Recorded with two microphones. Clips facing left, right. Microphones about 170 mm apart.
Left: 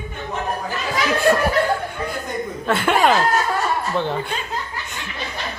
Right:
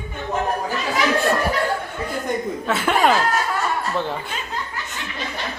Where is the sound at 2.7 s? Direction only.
Centre (ahead or behind).